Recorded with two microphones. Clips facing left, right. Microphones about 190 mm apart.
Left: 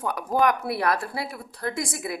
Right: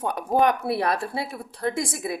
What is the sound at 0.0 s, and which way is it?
A woman's voice, 25° right (ahead or behind).